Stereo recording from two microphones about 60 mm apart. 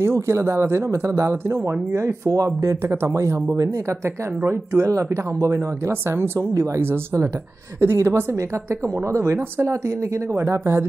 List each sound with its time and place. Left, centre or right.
0.0 s speech: right
4.5 s speech: right
4.9 s speech: right